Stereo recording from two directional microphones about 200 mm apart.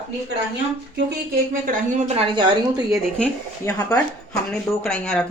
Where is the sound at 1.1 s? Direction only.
45° right (ahead or behind).